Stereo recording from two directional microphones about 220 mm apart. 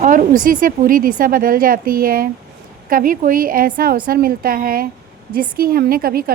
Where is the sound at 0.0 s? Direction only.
35° right (ahead or behind).